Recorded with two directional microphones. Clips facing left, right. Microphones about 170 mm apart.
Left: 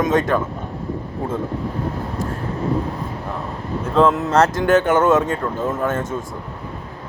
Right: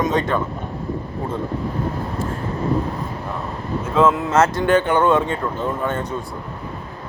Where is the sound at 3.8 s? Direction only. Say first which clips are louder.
Left 1 dB; 35° left (ahead or behind).